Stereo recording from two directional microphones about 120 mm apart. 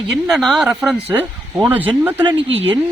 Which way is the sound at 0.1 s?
Centre (ahead or behind).